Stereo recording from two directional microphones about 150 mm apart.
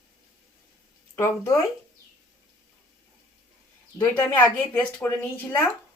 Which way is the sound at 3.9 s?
10° left (ahead or behind).